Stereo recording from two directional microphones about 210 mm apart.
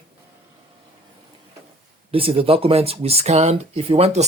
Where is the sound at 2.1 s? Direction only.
25° right (ahead or behind).